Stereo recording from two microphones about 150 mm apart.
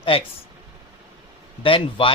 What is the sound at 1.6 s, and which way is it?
Speech, 35° left (ahead or behind).